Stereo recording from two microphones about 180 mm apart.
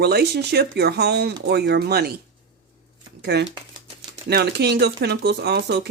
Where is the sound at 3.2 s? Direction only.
70° right (ahead or behind).